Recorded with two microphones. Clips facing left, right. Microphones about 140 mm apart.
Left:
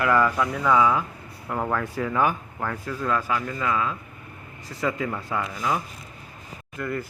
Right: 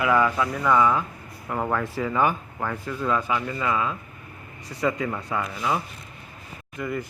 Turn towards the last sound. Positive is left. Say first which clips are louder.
# even
turn(degrees=-5)  # may be behind; listen again after turning